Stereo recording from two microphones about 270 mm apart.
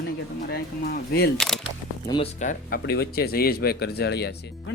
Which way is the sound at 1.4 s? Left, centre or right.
Centre.